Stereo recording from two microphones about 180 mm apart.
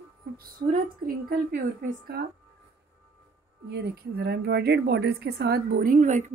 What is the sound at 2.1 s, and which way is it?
Speech, 65° right (ahead or behind).